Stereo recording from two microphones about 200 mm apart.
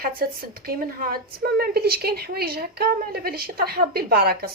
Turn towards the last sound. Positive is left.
turn(degrees=-50)  # may be behind; listen again after turning